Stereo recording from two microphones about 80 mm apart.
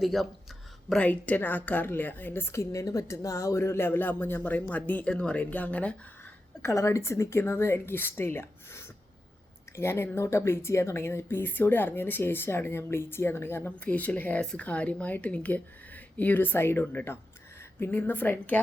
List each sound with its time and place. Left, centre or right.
0.0 s speech: centre
0.9 s a woman's voice: centre
6.6 s a woman's voice: left